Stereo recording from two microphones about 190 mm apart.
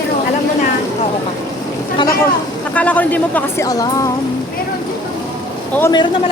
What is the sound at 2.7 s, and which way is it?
Speech, 10° left (ahead or behind).